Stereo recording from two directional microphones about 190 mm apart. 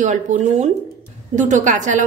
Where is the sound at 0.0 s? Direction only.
40° right (ahead or behind).